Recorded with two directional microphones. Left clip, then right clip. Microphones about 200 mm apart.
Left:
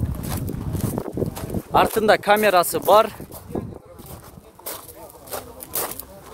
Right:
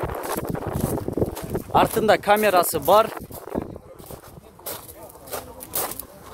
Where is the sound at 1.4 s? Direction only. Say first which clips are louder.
Left 2 dB; 15° left (ahead or behind).